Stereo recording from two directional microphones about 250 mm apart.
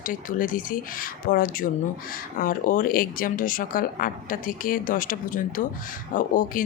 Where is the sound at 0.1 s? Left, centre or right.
Left.